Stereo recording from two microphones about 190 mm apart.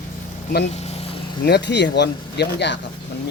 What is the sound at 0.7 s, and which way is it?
Vehicle, 35° left (ahead or behind).